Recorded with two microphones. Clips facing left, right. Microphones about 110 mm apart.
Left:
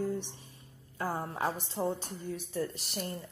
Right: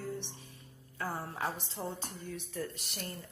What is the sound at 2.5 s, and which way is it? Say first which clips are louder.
Speech: left 6 dB; 35° left (ahead or behind).